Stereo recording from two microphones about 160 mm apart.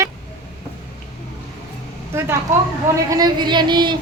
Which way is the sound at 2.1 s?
15° right (ahead or behind).